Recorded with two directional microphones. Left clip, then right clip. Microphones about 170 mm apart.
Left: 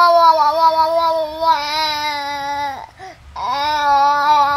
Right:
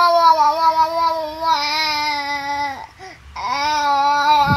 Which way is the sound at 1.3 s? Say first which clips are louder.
Left 3 dB; 35° left (ahead or behind).